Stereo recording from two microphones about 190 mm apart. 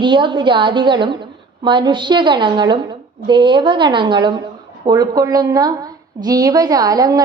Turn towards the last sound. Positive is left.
turn(degrees=-20)  # may be behind; listen again after turning